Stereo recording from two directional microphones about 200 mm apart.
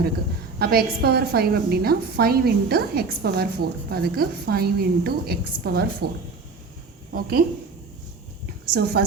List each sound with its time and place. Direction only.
0.6 s a woman's voice: 50° right (ahead or behind)
7.1 s a woman's voice: 45° right (ahead or behind)
8.7 s a woman's voice: 50° right (ahead or behind)